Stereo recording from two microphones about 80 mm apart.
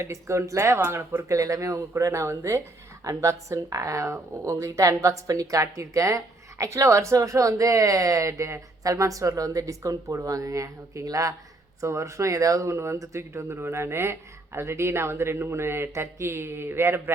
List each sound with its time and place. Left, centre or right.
0.0 s speech: right
1.1 s speech: right